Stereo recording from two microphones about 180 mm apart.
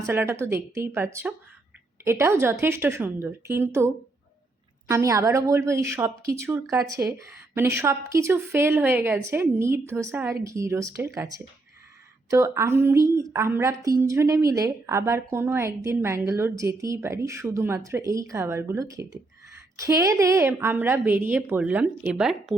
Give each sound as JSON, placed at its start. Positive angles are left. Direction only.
{"t": 0.0, "sound": "a woman's voice", "side_deg": -15}